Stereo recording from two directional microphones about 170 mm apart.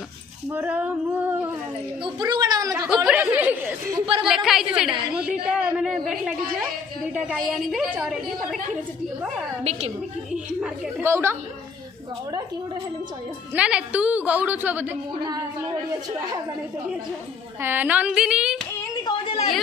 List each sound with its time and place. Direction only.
0.5 s a woman's voice: 10° right (ahead or behind)
2.0 s speech: 25° right (ahead or behind)
3.1 s chatter: 10° right (ahead or behind)
4.2 s a woman's voice: centre (ahead or behind)
9.6 s a woman's voice: 40° right (ahead or behind)
10.6 s a woman's voice: 15° right (ahead or behind)
13.6 s a woman's voice: 5° right (ahead or behind)
17.6 s a woman's voice: 10° right (ahead or behind)
19.0 s a sound: 30° left (ahead or behind)